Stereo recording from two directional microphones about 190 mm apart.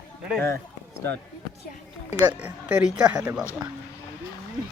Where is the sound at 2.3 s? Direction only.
10° right (ahead or behind).